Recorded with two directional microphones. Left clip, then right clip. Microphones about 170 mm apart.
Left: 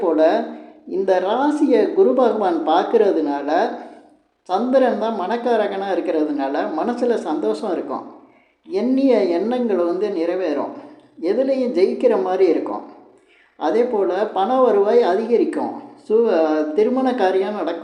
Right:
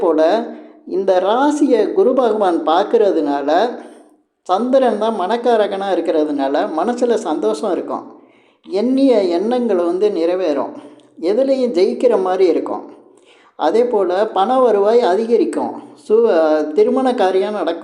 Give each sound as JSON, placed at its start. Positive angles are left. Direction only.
{"t": 0.0, "sound": "a sound", "side_deg": -25}
{"t": 0.9, "sound": "a woman's voice", "side_deg": -25}
{"t": 13.6, "sound": "a woman's voice", "side_deg": -25}